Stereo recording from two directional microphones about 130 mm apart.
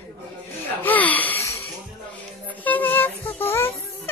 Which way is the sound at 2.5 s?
15° left (ahead or behind).